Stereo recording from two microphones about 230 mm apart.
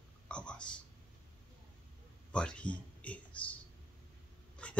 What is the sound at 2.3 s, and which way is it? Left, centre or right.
Speech, centre.